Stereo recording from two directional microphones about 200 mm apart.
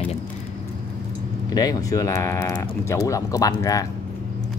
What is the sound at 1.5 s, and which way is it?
Speech, 20° left (ahead or behind).